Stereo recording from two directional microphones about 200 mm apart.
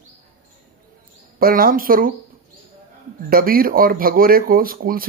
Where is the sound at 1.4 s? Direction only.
45° right (ahead or behind).